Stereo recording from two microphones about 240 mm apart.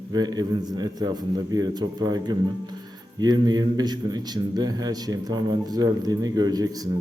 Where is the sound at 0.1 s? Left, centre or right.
Centre.